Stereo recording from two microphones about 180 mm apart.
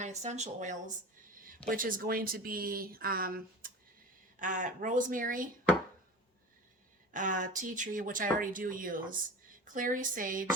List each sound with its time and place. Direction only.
0.0 s speech: 40° right (ahead or behind)
7.1 s speech: 45° right (ahead or behind)